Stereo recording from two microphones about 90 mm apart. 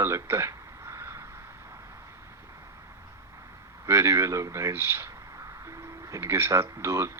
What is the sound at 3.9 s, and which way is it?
Speech, 35° right (ahead or behind).